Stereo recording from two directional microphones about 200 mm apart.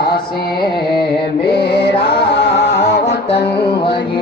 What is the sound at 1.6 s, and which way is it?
Music, 55° left (ahead or behind).